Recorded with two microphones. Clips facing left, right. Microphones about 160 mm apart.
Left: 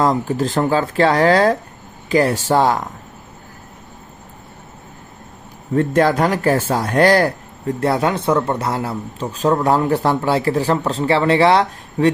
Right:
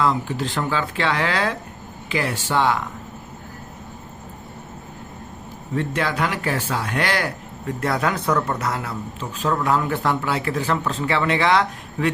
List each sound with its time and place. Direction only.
0.0 s a man's voice: 40° left (ahead or behind)
5.7 s a man's voice: 45° left (ahead or behind)
7.8 s a man's voice: 30° left (ahead or behind)